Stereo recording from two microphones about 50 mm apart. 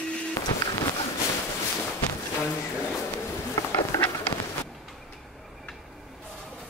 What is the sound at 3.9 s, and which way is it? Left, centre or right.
Run, left.